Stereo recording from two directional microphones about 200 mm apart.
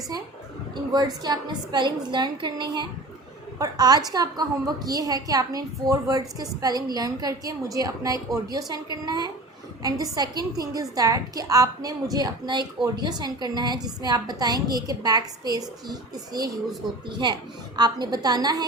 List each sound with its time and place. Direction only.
0.9 s a woman's voice: 20° right (ahead or behind)